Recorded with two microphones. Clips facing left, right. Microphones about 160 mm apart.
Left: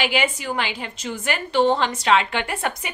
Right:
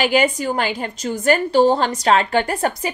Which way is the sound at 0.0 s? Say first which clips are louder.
Right 6 dB; 40° right (ahead or behind).